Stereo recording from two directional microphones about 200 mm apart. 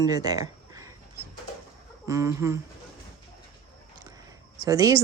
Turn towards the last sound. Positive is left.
turn(degrees=-15)  # may be behind; listen again after turning